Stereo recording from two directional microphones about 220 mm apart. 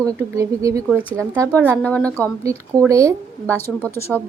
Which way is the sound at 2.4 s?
15° right (ahead or behind).